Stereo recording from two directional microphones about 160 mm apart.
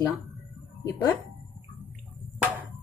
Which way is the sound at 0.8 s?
15° left (ahead or behind).